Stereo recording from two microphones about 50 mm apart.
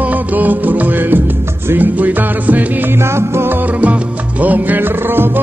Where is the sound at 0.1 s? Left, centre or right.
Right.